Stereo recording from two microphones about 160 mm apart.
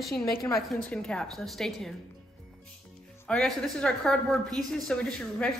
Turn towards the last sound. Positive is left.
turn(degrees=5)  # may be behind; listen again after turning